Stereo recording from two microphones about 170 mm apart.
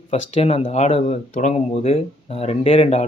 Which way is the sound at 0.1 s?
40° left (ahead or behind).